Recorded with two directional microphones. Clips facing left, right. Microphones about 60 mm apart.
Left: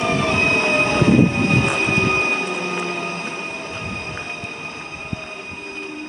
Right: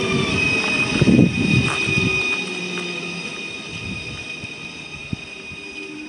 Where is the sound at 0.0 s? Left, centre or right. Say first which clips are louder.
Left 2 dB; left.